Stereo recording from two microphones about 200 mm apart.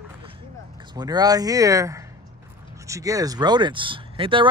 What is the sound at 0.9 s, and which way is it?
Speech, 20° right (ahead or behind).